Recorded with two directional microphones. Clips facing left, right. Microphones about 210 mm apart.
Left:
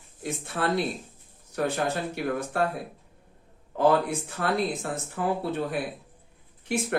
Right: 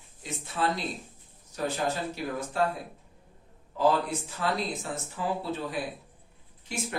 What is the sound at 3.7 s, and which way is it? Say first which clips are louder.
Speech: left 3 dB; 55° left (ahead or behind).